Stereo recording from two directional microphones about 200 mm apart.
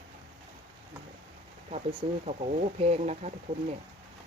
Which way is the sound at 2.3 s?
30° right (ahead or behind).